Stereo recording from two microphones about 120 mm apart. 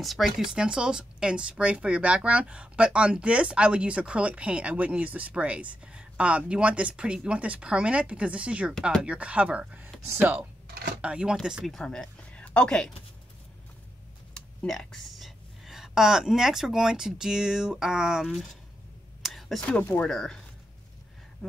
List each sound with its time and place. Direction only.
0.0 s speech: centre (ahead or behind)
14.3 s speech: 5° left (ahead or behind)
19.2 s a sound: centre (ahead or behind)
19.8 s speech: 15° left (ahead or behind)
20.1 s speech: 5° left (ahead or behind)